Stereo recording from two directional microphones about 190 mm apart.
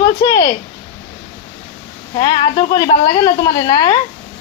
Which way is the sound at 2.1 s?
20° left (ahead or behind).